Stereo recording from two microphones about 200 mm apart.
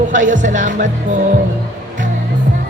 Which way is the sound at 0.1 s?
40° right (ahead or behind).